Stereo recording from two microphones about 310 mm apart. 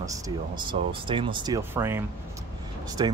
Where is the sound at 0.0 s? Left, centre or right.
Centre.